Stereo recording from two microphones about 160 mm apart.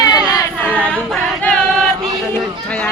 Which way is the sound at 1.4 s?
5° left (ahead or behind).